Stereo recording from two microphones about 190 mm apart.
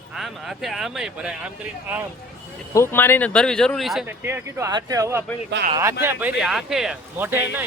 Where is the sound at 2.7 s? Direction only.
15° left (ahead or behind).